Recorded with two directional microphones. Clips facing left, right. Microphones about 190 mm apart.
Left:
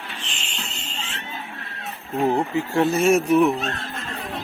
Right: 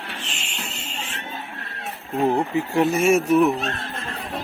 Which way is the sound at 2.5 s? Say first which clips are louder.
Even; 20° right (ahead or behind).